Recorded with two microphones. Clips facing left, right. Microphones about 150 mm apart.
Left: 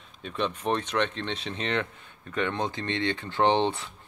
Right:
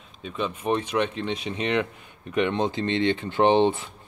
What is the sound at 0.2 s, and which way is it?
Speech, 5° right (ahead or behind).